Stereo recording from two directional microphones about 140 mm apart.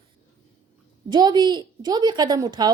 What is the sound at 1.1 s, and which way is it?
A woman's voice, 30° right (ahead or behind).